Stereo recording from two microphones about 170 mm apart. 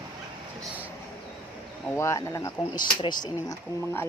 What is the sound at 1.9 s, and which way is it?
Speech, 15° left (ahead or behind).